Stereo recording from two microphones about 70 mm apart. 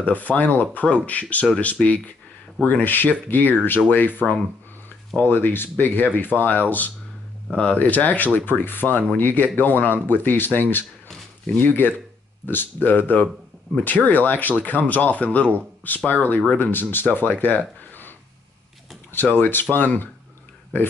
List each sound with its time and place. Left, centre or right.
0.0 s speech: left
19.3 s speech: left